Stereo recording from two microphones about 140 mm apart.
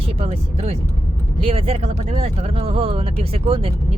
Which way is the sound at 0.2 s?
50° right (ahead or behind).